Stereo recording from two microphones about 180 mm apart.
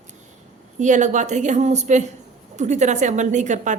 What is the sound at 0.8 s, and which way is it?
A woman's voice, 45° right (ahead or behind).